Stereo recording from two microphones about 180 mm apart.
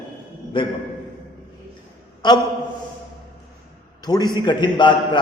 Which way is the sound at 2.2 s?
25° left (ahead or behind).